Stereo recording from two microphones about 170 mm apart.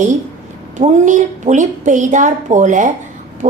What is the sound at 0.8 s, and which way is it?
A woman's voice, 45° right (ahead or behind).